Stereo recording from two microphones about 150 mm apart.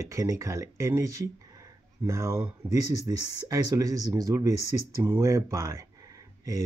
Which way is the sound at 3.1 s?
25° right (ahead or behind).